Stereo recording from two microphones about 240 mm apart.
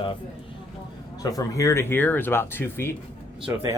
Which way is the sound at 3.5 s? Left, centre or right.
Centre.